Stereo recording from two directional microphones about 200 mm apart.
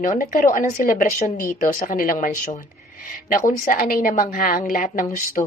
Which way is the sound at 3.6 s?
45° left (ahead or behind).